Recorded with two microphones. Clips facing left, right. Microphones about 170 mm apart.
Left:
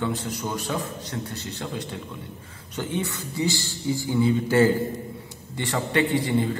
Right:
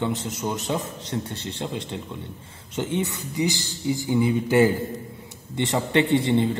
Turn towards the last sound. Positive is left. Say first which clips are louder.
# right 3 dB
turn(degrees=-25)  # may be behind; listen again after turning